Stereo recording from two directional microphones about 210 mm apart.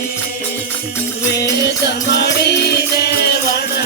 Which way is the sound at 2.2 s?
50° left (ahead or behind).